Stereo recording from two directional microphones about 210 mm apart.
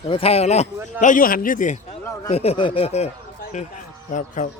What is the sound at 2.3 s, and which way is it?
Speech, 30° left (ahead or behind).